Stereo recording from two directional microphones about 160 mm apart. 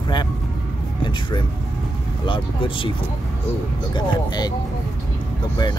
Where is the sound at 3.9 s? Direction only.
25° left (ahead or behind).